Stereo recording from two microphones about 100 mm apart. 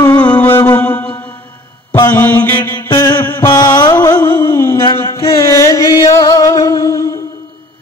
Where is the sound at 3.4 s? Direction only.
40° left (ahead or behind).